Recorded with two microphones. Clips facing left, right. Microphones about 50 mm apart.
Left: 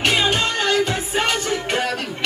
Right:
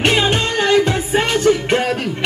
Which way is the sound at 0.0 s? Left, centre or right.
Centre.